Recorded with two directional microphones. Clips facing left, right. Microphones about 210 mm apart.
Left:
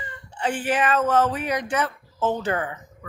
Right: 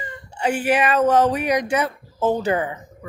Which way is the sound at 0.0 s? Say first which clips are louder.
Right 4 dB; 10° right (ahead or behind).